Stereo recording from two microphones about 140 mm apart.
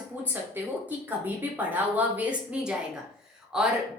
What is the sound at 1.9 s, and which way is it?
A woman's voice, 10° right (ahead or behind).